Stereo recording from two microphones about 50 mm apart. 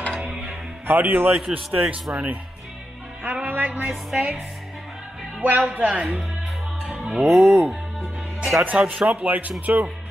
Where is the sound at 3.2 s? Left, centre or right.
Right.